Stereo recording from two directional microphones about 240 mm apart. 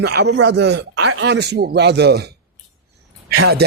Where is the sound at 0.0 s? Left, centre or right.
Right.